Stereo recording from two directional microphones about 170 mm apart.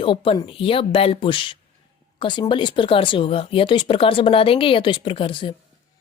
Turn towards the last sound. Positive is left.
turn(degrees=30)  # may be behind; listen again after turning